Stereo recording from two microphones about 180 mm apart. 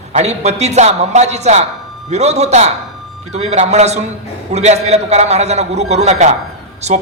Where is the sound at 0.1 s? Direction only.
40° right (ahead or behind).